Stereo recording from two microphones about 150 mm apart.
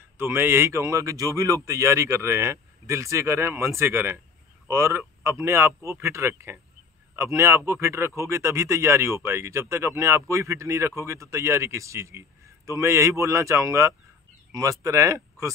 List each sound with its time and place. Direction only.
0.2 s speech: 15° right (ahead or behind)